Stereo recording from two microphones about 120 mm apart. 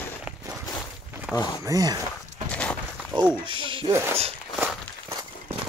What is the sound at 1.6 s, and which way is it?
Speech, 30° right (ahead or behind).